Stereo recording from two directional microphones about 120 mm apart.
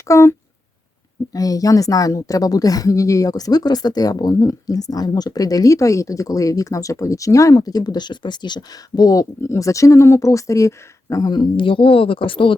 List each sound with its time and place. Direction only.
0.1 s speech: 25° left (ahead or behind); by 12.5 s 45° left (ahead or behind)